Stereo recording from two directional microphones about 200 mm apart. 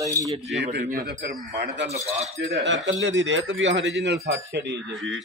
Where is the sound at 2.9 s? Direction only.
65° right (ahead or behind).